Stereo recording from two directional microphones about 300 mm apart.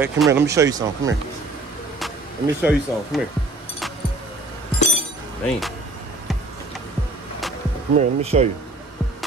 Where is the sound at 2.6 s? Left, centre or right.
Centre.